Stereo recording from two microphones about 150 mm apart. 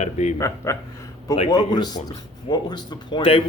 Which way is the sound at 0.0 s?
50° left (ahead or behind).